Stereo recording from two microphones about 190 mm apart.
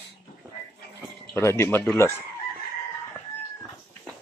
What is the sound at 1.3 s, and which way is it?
Speech, 15° left (ahead or behind).